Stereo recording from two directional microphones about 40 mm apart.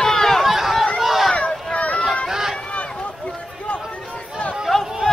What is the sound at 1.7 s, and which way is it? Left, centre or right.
Run, left.